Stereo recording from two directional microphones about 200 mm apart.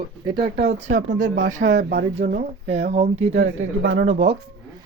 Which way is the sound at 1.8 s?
55° right (ahead or behind).